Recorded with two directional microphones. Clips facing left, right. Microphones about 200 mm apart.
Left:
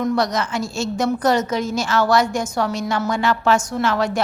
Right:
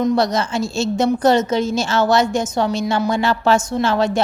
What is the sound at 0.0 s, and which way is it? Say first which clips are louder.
A woman's voice: right 3 dB; 25° right (ahead or behind).